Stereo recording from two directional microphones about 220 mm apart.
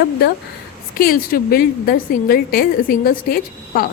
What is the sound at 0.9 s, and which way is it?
A woman's voice, 40° left (ahead or behind).